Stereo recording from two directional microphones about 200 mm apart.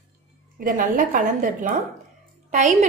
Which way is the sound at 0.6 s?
45° right (ahead or behind).